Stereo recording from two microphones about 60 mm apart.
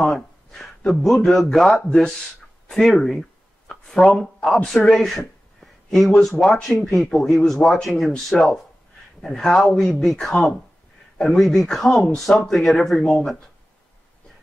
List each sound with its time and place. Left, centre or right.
0.0 s speech: centre
3.0 s a sound: centre
4.4 s speech: centre
4.7 s speech: centre